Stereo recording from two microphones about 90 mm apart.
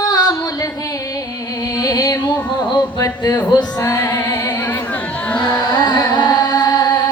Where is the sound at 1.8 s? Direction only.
45° left (ahead or behind).